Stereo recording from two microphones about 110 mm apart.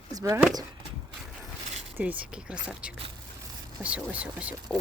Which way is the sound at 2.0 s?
15° right (ahead or behind).